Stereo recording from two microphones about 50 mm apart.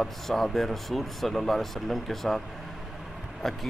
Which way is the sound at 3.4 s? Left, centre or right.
Centre.